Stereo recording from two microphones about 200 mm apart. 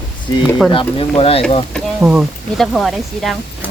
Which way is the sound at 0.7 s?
25° left (ahead or behind).